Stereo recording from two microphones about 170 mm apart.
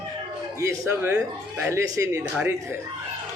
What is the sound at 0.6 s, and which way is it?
Speech, 15° right (ahead or behind).